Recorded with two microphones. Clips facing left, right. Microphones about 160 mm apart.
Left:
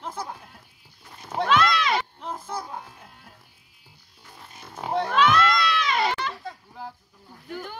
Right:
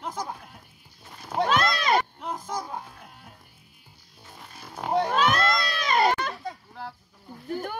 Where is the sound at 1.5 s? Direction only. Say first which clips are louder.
Left 2 dB; 45° right (ahead or behind).